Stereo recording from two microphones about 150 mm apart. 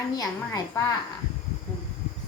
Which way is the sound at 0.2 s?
25° left (ahead or behind).